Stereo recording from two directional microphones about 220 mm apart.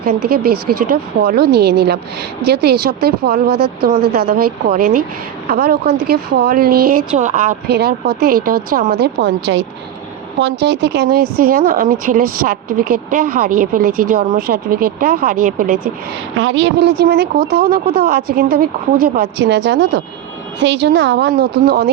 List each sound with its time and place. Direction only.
0.0 s a woman's voice: 45° right (ahead or behind)
16.4 s a woman's voice: 60° right (ahead or behind)